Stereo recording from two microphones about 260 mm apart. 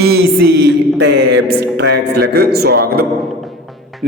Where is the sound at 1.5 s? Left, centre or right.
Right.